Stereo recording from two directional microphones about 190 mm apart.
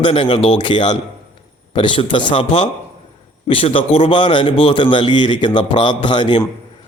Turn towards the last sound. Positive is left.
turn(degrees=25)  # may be behind; listen again after turning